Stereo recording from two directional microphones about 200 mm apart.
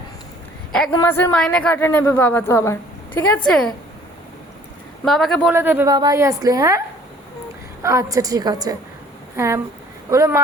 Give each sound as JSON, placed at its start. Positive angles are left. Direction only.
{"t": 0.7, "sound": "a woman's voice", "side_deg": 5}
{"t": 5.0, "sound": "speech", "side_deg": 0}
{"t": 5.5, "sound": "a woman's voice", "side_deg": -10}